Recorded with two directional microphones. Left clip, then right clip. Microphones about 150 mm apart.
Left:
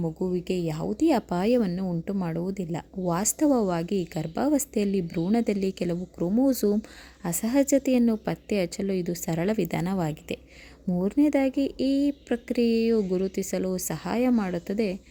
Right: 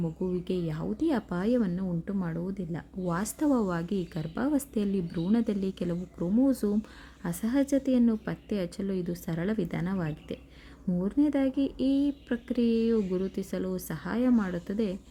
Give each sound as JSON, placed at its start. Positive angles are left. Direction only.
{"t": 0.0, "sound": "a woman's voice", "side_deg": 20}